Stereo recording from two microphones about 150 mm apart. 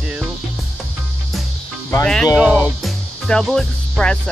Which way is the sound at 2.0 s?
5° left (ahead or behind).